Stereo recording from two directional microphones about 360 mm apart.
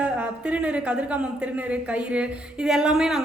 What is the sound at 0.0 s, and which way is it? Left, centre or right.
Speech, centre.